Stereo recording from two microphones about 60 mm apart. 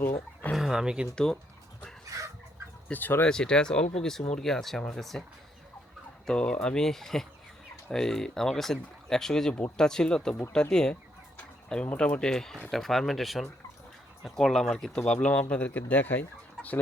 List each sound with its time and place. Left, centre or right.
0.0 s a sound: left
0.5 s speech: centre
1.1 s speech: centre
2.0 s chicken: right
2.9 s speech: left
3.2 s speech: centre
6.2 s speech: centre
11.9 s speech: centre